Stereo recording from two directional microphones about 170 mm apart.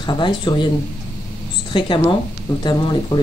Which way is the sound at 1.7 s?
30° left (ahead or behind).